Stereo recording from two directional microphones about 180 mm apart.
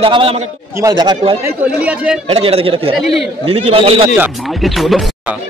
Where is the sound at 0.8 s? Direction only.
20° right (ahead or behind).